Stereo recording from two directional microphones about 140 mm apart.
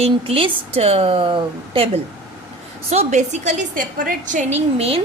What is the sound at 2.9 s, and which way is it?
A woman's voice, 55° right (ahead or behind).